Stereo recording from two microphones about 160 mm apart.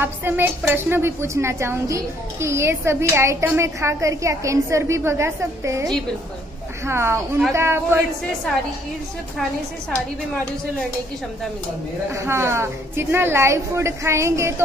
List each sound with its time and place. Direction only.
0.0 s a woman's voice: 15° right (ahead or behind)
6.9 s a woman's voice: 15° right (ahead or behind)
12.1 s a woman's voice: 15° right (ahead or behind)